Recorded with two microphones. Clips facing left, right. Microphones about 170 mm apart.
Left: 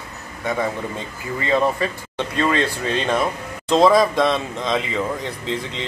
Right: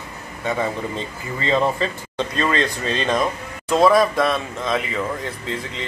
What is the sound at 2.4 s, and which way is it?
Speech, 15° left (ahead or behind).